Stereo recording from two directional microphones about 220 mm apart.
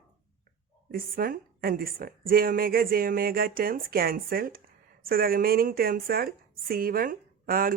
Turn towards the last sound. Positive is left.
turn(degrees=-40)  # may be behind; listen again after turning